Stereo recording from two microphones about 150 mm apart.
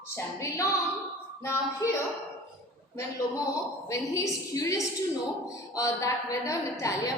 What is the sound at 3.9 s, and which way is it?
A woman's voice, 20° left (ahead or behind).